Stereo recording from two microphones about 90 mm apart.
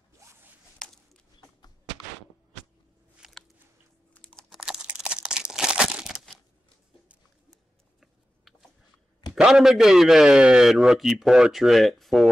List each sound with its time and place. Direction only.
0.2 s zipper: 30° right (ahead or behind)
0.8 s a sound: 10° left (ahead or behind)
3.2 s biting: 5° right (ahead or behind)
4.6 s crumpling: 10° right (ahead or behind)
8.0 s a sound: 5° right (ahead or behind)
9.3 s a man's voice: 5° right (ahead or behind)